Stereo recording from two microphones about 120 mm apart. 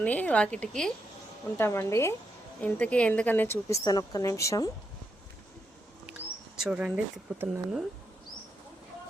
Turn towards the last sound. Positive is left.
turn(degrees=-5)  # may be behind; listen again after turning